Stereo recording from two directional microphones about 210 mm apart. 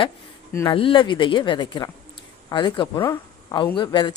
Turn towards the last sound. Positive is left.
turn(degrees=20)  # may be behind; listen again after turning